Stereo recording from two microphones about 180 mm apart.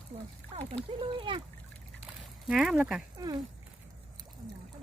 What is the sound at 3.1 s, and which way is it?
Speech, 20° right (ahead or behind).